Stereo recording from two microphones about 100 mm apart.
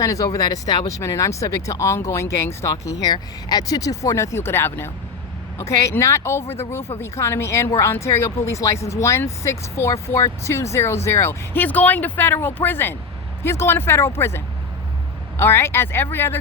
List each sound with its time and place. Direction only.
0.0 s speech: 35° left (ahead or behind)
3.0 s speech: 40° left (ahead or behind); by 16.4 s 20° left (ahead or behind)